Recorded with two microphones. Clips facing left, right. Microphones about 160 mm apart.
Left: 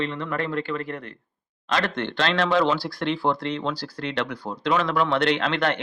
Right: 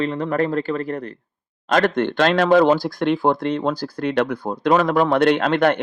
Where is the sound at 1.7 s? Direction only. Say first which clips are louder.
Right 8 dB; 50° right (ahead or behind).